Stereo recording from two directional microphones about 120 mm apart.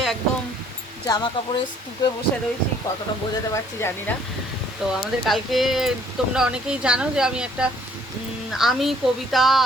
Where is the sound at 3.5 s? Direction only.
20° left (ahead or behind).